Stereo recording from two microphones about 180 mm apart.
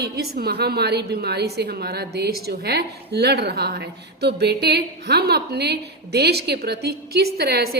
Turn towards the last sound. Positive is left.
turn(degrees=-60)  # may be behind; listen again after turning